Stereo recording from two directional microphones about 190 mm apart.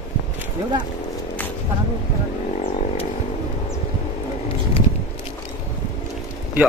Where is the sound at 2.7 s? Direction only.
35° left (ahead or behind).